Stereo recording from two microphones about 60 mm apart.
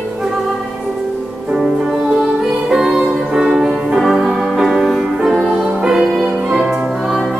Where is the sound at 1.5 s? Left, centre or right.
Centre.